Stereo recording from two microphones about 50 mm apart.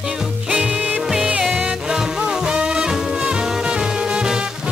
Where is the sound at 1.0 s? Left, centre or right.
Centre.